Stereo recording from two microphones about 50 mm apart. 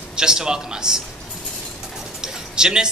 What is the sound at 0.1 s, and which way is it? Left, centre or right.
Speech, centre.